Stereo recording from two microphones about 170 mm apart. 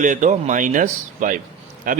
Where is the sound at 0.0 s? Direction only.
45° right (ahead or behind).